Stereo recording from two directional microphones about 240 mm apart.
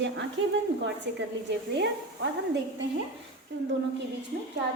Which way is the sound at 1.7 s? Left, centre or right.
Right.